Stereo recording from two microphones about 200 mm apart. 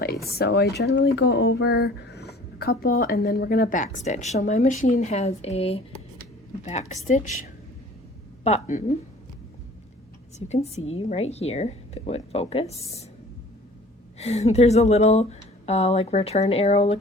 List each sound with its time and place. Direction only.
0.3 s speech: 55° left (ahead or behind)
1.1 s speech: 70° left (ahead or behind); by 7.3 s 40° left (ahead or behind)
8.4 s speech: 35° left (ahead or behind)
10.3 s a woman's voice: 35° left (ahead or behind)
14.2 s speech: 30° left (ahead or behind)